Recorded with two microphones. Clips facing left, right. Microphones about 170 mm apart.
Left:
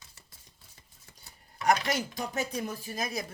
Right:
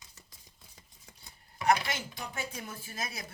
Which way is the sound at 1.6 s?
40° left (ahead or behind).